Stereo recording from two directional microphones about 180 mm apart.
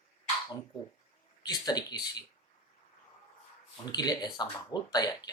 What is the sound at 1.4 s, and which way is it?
Speech, 20° left (ahead or behind).